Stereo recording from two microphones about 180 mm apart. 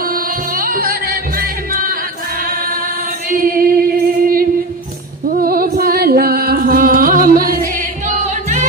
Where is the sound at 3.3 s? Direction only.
50° right (ahead or behind).